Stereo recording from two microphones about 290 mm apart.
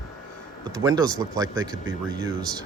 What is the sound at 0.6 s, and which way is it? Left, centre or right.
Speech, centre.